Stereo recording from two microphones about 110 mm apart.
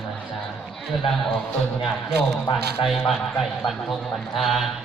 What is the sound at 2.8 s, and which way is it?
A man's voice, centre (ahead or behind).